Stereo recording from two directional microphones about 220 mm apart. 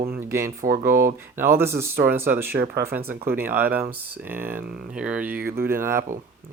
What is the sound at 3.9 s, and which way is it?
Speech, 90° right.